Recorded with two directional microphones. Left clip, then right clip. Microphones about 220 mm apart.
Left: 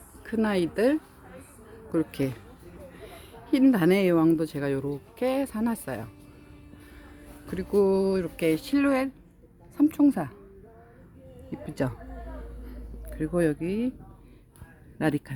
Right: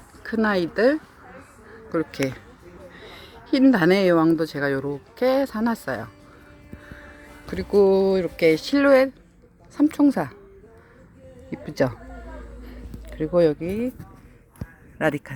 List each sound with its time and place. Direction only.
0.2 s speech: centre (ahead or behind)
2.9 s a sound: centre (ahead or behind)
3.4 s speech: centre (ahead or behind)
7.4 s speech: centre (ahead or behind)
11.5 s speech: centre (ahead or behind)
12.6 s a sound: centre (ahead or behind)
14.9 s a man's voice: 20° left (ahead or behind)